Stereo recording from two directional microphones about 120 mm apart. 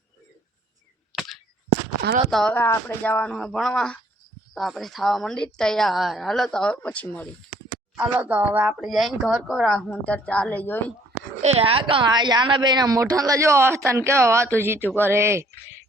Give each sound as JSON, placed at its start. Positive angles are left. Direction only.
{"t": 1.1, "sound": "a sound", "side_deg": -5}
{"t": 2.3, "sound": "speech", "side_deg": 5}
{"t": 2.6, "sound": "a woman's voice", "side_deg": 20}
{"t": 3.3, "sound": "speech", "side_deg": 0}
{"t": 7.9, "sound": "speech", "side_deg": -10}
{"t": 8.8, "sound": "a woman's voice", "side_deg": 0}
{"t": 11.4, "sound": "a woman's voice", "side_deg": -55}